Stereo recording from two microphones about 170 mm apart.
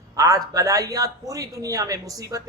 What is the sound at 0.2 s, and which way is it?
Speech, 20° right (ahead or behind).